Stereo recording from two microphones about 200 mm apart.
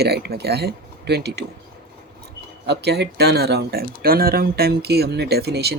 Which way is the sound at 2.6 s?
55° right (ahead or behind).